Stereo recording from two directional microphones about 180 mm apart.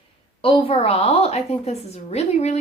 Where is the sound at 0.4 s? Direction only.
30° left (ahead or behind).